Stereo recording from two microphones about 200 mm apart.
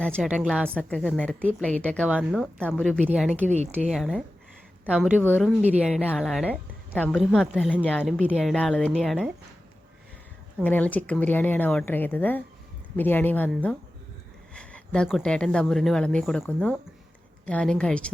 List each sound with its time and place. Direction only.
0.1 s speech: 5° right (ahead or behind)
2.0 s speech: 5° right (ahead or behind)
3.4 s a woman's voice: 35° right (ahead or behind)
3.8 s a woman's voice: centre (ahead or behind)
5.2 s speech: 5° left (ahead or behind)
5.5 s speech: 5° right (ahead or behind)
6.0 s speech: 5° left (ahead or behind)
10.6 s speech: 10° left (ahead or behind)